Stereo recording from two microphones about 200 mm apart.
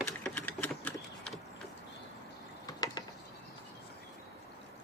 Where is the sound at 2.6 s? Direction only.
20° left (ahead or behind).